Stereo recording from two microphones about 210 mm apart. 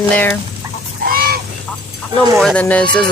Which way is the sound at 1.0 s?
45° right (ahead or behind).